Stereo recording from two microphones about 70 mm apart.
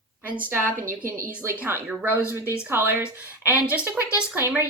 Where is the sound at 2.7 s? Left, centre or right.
Right.